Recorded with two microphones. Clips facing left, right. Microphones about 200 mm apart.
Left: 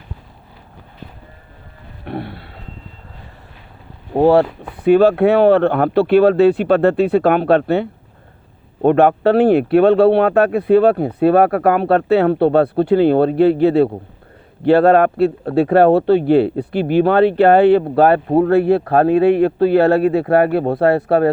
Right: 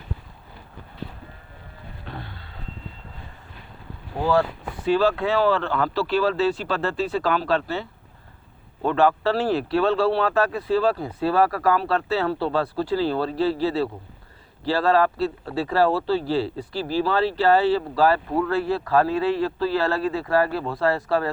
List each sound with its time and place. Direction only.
2.0 s speech: 65° left (ahead or behind)
4.1 s speech: 65° left (ahead or behind)